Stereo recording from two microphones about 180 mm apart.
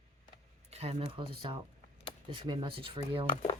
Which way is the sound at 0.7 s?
35° right (ahead or behind).